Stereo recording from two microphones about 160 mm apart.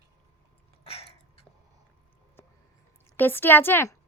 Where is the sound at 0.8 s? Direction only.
40° left (ahead or behind).